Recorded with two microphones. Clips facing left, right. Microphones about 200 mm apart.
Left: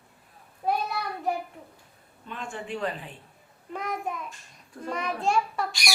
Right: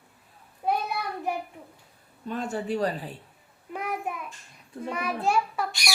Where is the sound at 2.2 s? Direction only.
40° right (ahead or behind).